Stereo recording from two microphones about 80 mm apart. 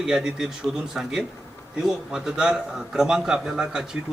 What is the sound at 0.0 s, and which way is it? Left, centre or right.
Speech, centre.